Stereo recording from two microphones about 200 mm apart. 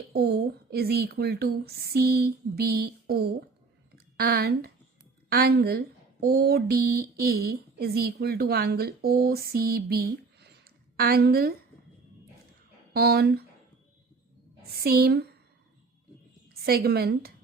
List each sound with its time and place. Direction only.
0.1 s speech: 55° right (ahead or behind)
12.9 s speech: 50° right (ahead or behind)
14.8 s speech: 50° right (ahead or behind)
16.6 s speech: 50° right (ahead or behind)